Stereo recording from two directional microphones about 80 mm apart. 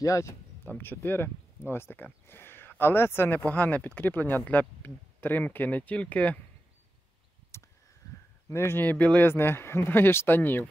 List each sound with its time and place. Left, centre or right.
0.0 s speech: left
0.7 s speech: left
7.5 s a sound: left
8.5 s speech: left
9.3 s speech: left